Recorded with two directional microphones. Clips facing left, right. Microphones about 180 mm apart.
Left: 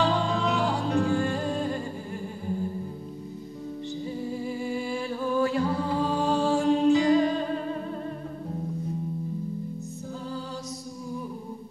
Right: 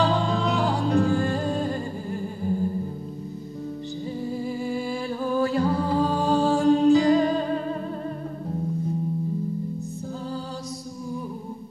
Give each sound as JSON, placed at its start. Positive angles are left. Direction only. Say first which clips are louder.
{"t": 0.0, "sound": "music", "louder": "right 2 dB", "side_deg": -35}
{"t": 4.3, "sound": "music", "louder": "right 3 dB", "side_deg": -40}